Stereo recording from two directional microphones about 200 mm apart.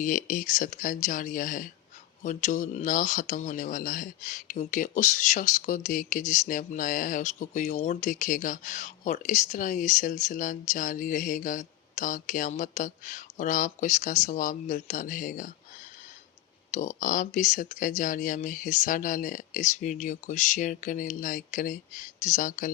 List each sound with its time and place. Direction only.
0.0 s speech: 40° left (ahead or behind)
16.7 s speech: 40° left (ahead or behind)